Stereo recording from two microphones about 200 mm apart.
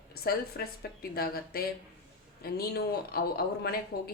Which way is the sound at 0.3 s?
50° left (ahead or behind).